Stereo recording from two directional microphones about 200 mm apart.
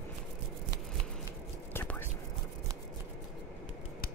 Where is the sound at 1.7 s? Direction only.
10° left (ahead or behind).